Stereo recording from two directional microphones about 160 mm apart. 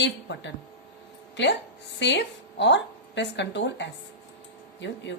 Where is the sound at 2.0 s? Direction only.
90° left.